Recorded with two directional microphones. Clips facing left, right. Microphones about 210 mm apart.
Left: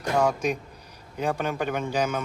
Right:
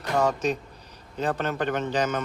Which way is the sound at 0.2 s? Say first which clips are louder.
Right 1 dB; 10° left (ahead or behind).